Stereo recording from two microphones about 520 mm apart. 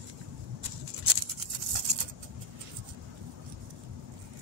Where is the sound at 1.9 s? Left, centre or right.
Right.